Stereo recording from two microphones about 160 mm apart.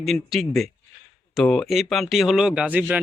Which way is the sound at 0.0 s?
Centre (ahead or behind).